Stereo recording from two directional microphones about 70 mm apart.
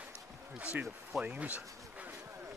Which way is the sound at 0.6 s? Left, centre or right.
Centre.